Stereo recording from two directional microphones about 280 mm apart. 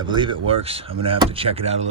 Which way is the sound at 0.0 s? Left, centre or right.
Centre.